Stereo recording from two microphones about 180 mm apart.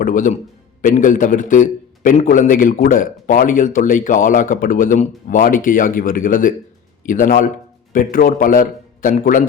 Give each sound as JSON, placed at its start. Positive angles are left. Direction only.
{"t": 0.0, "sound": "a man's voice", "side_deg": 45}